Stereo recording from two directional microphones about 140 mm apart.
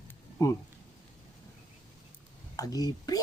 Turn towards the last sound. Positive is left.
turn(degrees=25)  # may be behind; listen again after turning